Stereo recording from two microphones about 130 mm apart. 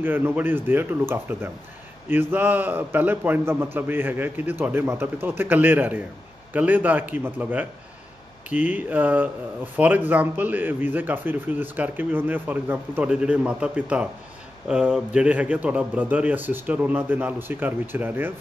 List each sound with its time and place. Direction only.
0.0 s a man's voice: 15° right (ahead or behind)